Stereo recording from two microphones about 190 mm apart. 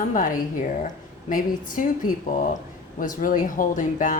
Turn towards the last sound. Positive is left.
turn(degrees=45)  # may be behind; listen again after turning